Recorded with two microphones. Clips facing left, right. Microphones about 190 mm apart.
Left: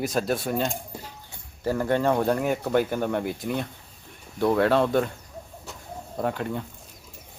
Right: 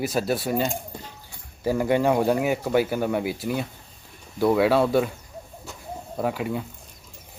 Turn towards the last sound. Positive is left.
turn(degrees=-5)  # may be behind; listen again after turning